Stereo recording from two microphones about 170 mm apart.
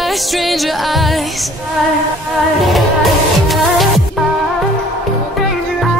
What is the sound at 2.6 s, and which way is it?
Music, centre (ahead or behind).